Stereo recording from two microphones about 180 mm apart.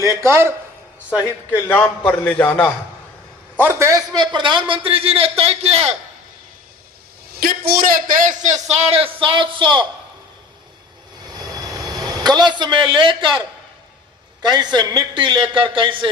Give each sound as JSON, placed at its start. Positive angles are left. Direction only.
{"t": 0.0, "sound": "a man's voice", "side_deg": -15}
{"t": 1.5, "sound": "a man's voice", "side_deg": 10}
{"t": 3.6, "sound": "a man's voice", "side_deg": -15}
{"t": 7.3, "sound": "a man's voice", "side_deg": -55}
{"t": 11.3, "sound": "a sound", "side_deg": -20}
{"t": 14.4, "sound": "a man's voice", "side_deg": -25}